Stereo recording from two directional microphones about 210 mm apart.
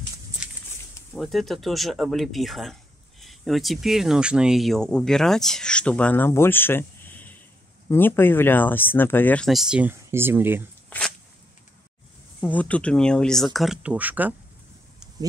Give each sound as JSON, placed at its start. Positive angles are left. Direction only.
{"t": 1.1, "sound": "speech", "side_deg": 0}
{"t": 10.9, "sound": "a sound", "side_deg": 5}
{"t": 12.4, "sound": "speech", "side_deg": 5}